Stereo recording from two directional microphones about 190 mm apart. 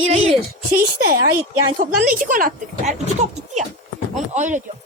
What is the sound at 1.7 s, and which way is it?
Speech, 45° right (ahead or behind).